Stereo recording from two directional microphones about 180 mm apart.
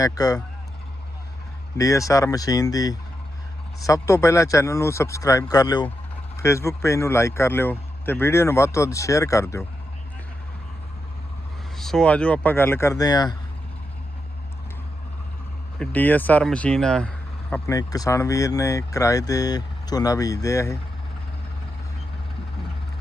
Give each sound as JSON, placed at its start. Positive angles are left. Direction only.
{"t": 0.0, "sound": "speech", "side_deg": 20}
{"t": 1.8, "sound": "a man's voice", "side_deg": 20}
{"t": 11.8, "sound": "a man's voice", "side_deg": 5}
{"t": 15.8, "sound": "speech", "side_deg": 10}
{"t": 17.7, "sound": "speech", "side_deg": 20}